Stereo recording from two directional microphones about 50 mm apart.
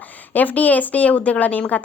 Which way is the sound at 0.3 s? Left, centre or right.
Left.